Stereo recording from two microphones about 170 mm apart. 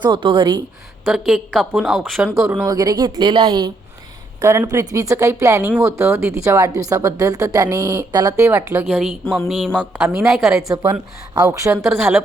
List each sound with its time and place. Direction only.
0.0 s a woman's voice: 30° right (ahead or behind)
1.0 s a woman's voice: centre (ahead or behind)
2.4 s a woman's voice: 15° right (ahead or behind)
8.4 s a woman's voice: 10° right (ahead or behind)
11.3 s a woman's voice: 20° right (ahead or behind)
11.8 s a woman's voice: centre (ahead or behind)